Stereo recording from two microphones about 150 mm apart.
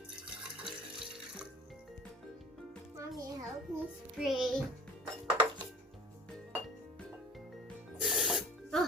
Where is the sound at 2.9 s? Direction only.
20° right (ahead or behind).